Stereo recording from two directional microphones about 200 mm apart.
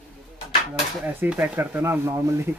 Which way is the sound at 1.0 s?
10° right (ahead or behind).